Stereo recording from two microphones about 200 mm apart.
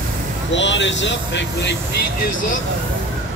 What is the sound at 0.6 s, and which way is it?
Speech, 65° left (ahead or behind).